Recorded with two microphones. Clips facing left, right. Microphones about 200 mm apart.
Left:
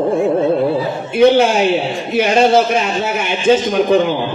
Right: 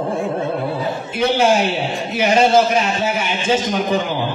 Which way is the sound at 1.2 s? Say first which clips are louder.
Left 5 dB; 55° left (ahead or behind).